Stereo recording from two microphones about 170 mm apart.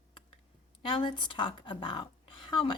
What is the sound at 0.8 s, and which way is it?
Speech, 30° left (ahead or behind).